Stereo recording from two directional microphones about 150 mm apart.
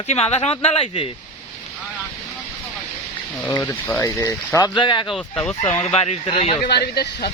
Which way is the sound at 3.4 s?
20° left (ahead or behind).